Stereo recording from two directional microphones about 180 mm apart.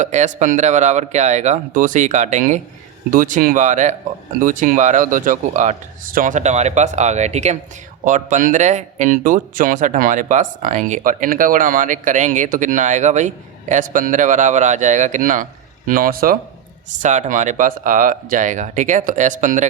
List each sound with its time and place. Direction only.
0.0 s speech: 40° right (ahead or behind)